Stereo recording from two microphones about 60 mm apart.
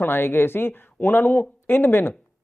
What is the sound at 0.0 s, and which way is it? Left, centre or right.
Speech, left.